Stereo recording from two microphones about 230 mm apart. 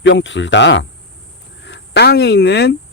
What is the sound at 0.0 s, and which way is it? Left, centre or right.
Speech, left.